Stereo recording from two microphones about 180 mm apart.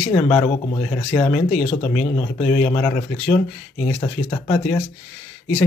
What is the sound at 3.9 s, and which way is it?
Speech, 20° left (ahead or behind).